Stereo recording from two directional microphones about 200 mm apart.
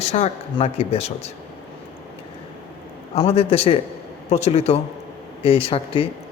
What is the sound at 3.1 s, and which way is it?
A man's voice, 30° left (ahead or behind).